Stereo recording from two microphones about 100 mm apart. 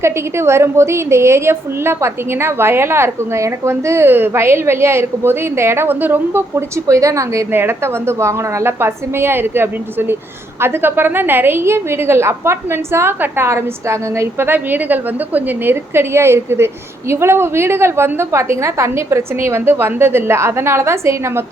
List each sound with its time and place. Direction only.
0.0 s a woman's voice: 25° right (ahead or behind)
6.8 s a woman's voice: 30° right (ahead or behind)